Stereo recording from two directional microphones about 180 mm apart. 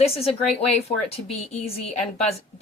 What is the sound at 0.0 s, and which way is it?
Speech, 35° left (ahead or behind).